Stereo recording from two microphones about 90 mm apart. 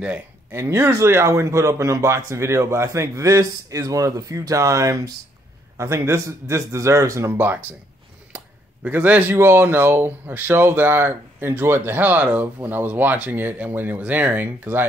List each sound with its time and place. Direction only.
0.5 s speech: 30° right (ahead or behind)
8.8 s speech: 15° right (ahead or behind)